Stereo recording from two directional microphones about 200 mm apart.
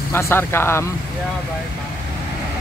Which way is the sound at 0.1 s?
10° left (ahead or behind).